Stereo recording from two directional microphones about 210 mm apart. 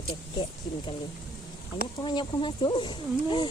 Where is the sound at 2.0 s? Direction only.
20° left (ahead or behind).